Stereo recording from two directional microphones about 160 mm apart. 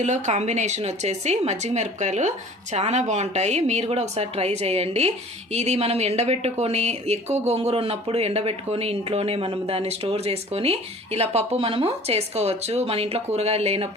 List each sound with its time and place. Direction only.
0.0 s a woman's voice: 45° right (ahead or behind)